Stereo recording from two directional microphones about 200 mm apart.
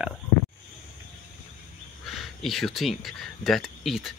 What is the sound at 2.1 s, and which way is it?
Speech, centre (ahead or behind).